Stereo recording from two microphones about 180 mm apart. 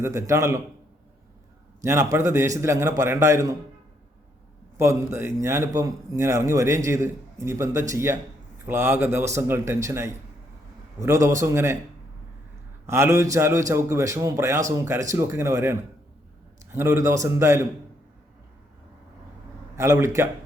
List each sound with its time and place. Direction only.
0.0 s a man's voice: 15° right (ahead or behind)
1.8 s a man's voice: 15° right (ahead or behind)
4.8 s a man's voice: 15° right (ahead or behind)
12.8 s a man's voice: 15° right (ahead or behind)
19.7 s a man's voice: 15° right (ahead or behind)